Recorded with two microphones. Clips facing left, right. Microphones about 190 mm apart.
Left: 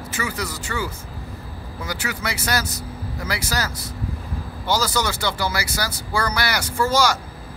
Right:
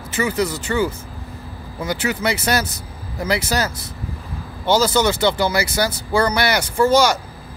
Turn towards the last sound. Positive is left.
turn(degrees=-20)  # may be behind; listen again after turning